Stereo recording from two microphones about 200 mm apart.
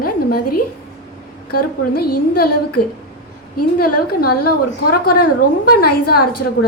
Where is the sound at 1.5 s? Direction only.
50° left (ahead or behind).